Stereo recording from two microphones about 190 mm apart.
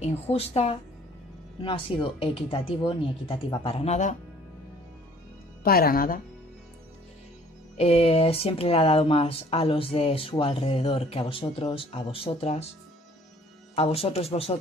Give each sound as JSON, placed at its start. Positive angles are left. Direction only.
{"t": 0.1, "sound": "speech", "side_deg": 35}
{"t": 5.6, "sound": "speech", "side_deg": 50}
{"t": 7.7, "sound": "speech", "side_deg": 30}
{"t": 13.7, "sound": "speech", "side_deg": 30}